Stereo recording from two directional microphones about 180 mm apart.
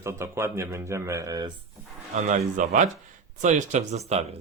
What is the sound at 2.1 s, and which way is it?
Speech, 40° right (ahead or behind).